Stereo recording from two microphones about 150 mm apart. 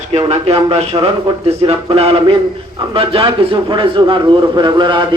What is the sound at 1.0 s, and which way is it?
A man's voice, 40° right (ahead or behind).